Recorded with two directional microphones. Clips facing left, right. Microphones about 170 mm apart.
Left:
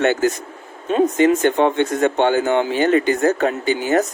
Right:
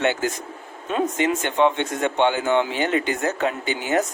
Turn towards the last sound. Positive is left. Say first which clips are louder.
# left 5 dB
turn(degrees=40)  # may be behind; listen again after turning